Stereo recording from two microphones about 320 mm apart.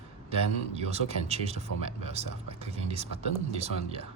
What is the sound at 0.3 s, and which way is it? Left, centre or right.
Speech, centre.